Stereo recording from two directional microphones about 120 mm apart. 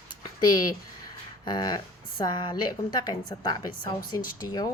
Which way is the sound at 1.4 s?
35° left (ahead or behind).